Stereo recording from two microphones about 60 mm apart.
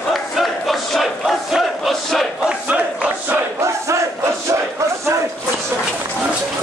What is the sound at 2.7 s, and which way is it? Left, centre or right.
Battle cry, right.